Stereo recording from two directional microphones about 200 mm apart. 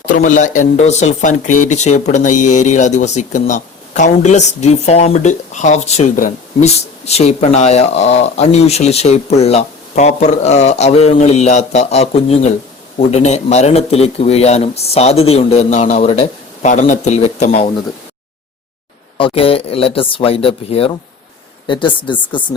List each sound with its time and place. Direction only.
0.2 s speech: 40° left (ahead or behind)
19.1 s speech: 25° left (ahead or behind)